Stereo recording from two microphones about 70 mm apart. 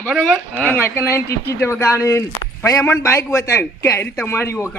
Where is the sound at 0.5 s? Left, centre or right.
Left.